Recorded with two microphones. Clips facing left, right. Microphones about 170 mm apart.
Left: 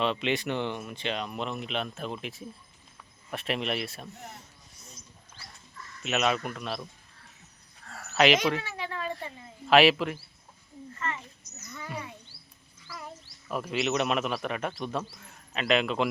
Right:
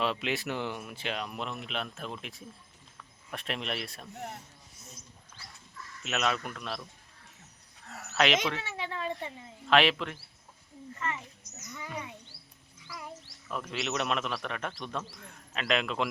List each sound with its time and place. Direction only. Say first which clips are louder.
0.0 s a man's voice: left 3 dB; 5° right (ahead or behind)
6.0 s a man's voice: left 4 dB; centre (ahead or behind)
8.1 s speech: left 4 dB; 5° left (ahead or behind)
8.6 s speech: left 1 dB; 25° right (ahead or behind)
9.6 s speech: left 5 dB; 5° left (ahead or behind)
11.0 s speech: left 1 dB; 15° right (ahead or behind)
13.5 s a man's voice: left 5 dB; 10° left (ahead or behind)